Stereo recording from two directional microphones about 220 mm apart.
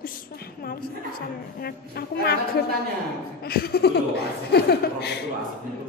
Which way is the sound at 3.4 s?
45° left (ahead or behind).